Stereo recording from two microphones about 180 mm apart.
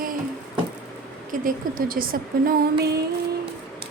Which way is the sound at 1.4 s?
50° right (ahead or behind).